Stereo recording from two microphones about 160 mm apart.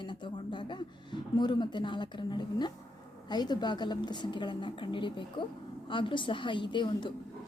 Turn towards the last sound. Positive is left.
turn(degrees=30)  # may be behind; listen again after turning